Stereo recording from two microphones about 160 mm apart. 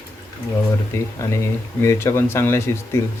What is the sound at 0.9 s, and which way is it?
Speech, 15° left (ahead or behind).